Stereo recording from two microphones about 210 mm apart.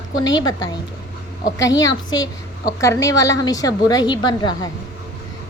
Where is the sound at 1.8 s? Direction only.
15° left (ahead or behind).